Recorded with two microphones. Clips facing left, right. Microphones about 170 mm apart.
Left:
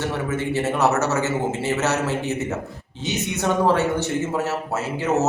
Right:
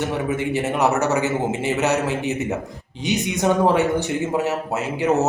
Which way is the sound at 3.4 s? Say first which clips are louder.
Right 2 dB; 15° right (ahead or behind).